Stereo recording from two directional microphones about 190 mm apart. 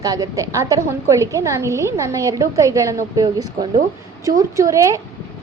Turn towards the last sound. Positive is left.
turn(degrees=-15)  # may be behind; listen again after turning